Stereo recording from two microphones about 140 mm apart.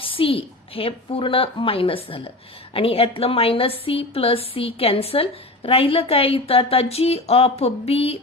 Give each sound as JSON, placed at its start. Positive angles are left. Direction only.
{"t": 0.0, "sound": "a woman's voice", "side_deg": 40}